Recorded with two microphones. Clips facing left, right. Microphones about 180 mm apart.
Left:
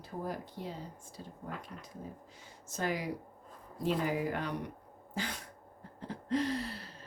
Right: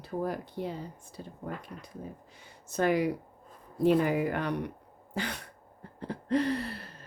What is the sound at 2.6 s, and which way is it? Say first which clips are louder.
Speech: right 8 dB; 65° right (ahead or behind).